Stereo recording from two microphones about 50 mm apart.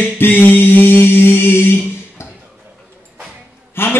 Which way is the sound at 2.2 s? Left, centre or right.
Left.